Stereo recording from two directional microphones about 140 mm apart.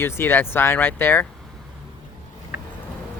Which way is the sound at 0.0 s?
15° left (ahead or behind).